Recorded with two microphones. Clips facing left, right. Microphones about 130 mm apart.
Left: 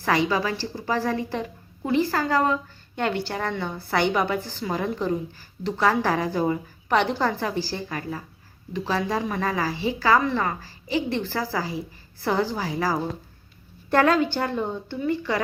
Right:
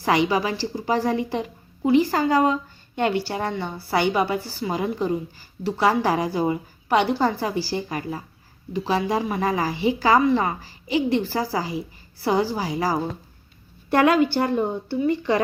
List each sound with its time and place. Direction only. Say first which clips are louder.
0.0 s a woman's voice: right 2 dB; 15° right (ahead or behind)